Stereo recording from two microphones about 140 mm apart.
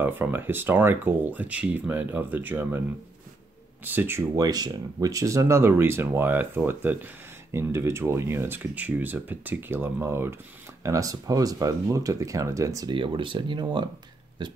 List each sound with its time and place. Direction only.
0.0 s speech: 15° right (ahead or behind)
3.8 s speech: 15° right (ahead or behind)
4.5 s speech: 30° right (ahead or behind)
12.9 s speech: 35° right (ahead or behind)